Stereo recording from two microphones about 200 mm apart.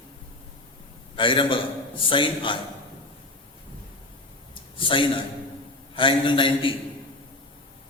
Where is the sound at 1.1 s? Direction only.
25° left (ahead or behind).